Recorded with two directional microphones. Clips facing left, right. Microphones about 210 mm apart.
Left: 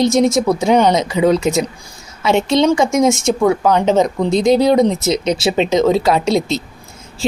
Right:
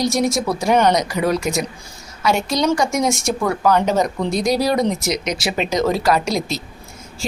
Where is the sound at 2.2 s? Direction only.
25° left (ahead or behind).